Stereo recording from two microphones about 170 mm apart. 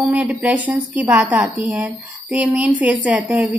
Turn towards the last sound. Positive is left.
turn(degrees=-10)  # may be behind; listen again after turning